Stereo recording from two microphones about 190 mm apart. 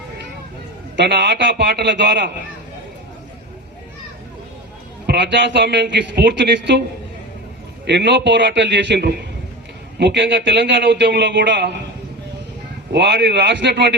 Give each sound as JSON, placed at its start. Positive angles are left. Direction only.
{"t": 0.9, "sound": "a man's voice", "side_deg": -65}
{"t": 5.0, "sound": "a man's voice", "side_deg": -65}
{"t": 7.9, "sound": "a man's voice", "side_deg": -65}
{"t": 12.9, "sound": "a man's voice", "side_deg": -60}